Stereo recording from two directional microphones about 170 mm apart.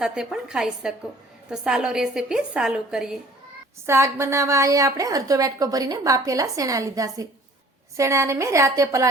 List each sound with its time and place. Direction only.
0.0 s a woman's voice: 5° right (ahead or behind)
3.8 s a woman's voice: 15° right (ahead or behind)